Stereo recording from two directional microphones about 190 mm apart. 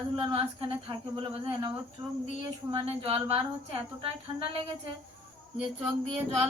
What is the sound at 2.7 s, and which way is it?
Speech, 30° right (ahead or behind).